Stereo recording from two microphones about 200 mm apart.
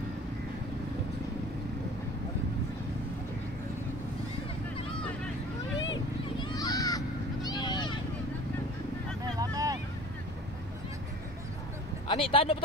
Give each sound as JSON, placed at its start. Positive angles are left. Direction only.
{"t": 6.4, "sound": "a sound", "side_deg": 20}
{"t": 9.4, "sound": "vehicle", "side_deg": -15}
{"t": 12.1, "sound": "speech", "side_deg": 25}